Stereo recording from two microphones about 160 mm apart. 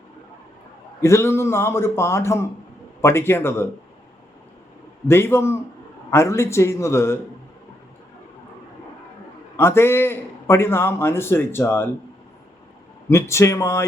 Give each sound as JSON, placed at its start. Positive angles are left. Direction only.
{"t": 1.0, "sound": "a man's voice", "side_deg": 15}
{"t": 5.0, "sound": "a man's voice", "side_deg": 15}
{"t": 9.6, "sound": "a man's voice", "side_deg": 15}
{"t": 13.1, "sound": "a man's voice", "side_deg": 15}